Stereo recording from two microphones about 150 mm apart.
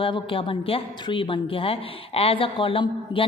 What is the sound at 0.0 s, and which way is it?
A woman's voice, 35° left (ahead or behind).